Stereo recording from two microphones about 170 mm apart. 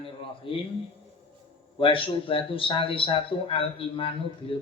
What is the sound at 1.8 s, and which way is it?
Speech, 30° left (ahead or behind).